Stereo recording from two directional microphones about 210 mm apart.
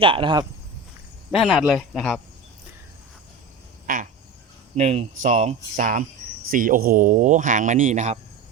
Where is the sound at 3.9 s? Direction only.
40° right (ahead or behind).